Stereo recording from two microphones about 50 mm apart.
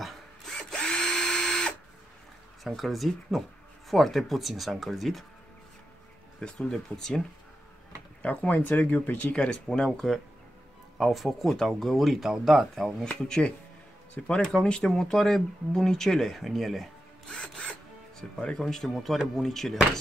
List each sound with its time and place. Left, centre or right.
0.6 s drill: centre
2.6 s speech: centre
6.4 s speech: centre
8.2 s speech: left
9.3 s speech: centre
11.0 s speech: centre
14.1 s speech: left; by 16.9 s centre
17.3 s speech: centre
18.9 s speech: centre